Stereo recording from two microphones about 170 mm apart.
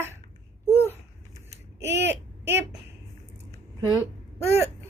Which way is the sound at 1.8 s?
10° right (ahead or behind).